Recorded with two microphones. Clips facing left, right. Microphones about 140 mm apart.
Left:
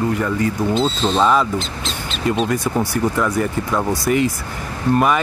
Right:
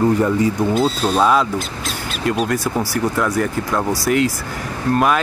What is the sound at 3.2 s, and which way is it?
Speech, centre (ahead or behind).